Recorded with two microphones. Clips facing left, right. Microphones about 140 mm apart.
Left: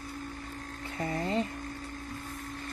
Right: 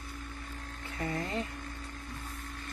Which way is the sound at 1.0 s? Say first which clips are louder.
Left 4 dB; 30° left (ahead or behind).